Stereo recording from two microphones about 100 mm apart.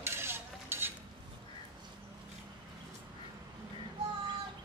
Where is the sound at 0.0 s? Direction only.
25° right (ahead or behind).